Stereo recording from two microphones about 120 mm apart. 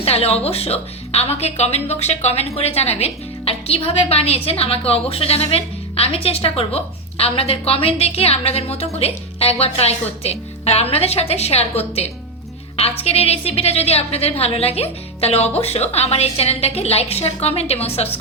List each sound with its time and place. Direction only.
0.0 s a woman's voice: 55° left (ahead or behind)